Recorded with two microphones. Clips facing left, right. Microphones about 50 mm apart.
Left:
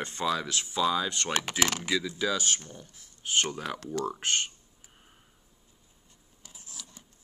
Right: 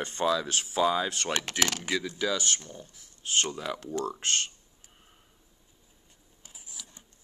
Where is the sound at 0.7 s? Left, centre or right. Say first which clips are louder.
Right 2 dB; right.